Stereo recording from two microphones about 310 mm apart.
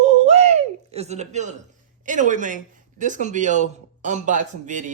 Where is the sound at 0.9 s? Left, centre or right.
Right.